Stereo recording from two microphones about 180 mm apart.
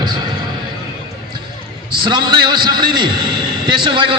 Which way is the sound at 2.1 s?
25° right (ahead or behind).